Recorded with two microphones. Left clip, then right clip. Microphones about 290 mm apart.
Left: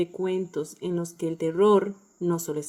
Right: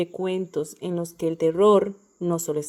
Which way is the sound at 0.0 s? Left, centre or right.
Centre.